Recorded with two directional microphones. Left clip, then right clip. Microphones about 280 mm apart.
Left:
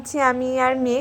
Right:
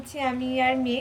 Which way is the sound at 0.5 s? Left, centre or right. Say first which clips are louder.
Left 4 dB; left.